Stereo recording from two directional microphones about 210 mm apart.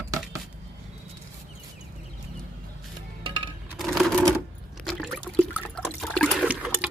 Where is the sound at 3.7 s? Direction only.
Centre (ahead or behind).